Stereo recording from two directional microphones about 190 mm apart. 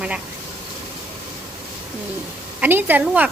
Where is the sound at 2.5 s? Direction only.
10° right (ahead or behind).